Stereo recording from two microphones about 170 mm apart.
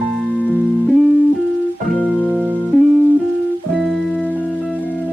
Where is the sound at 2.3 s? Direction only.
10° right (ahead or behind).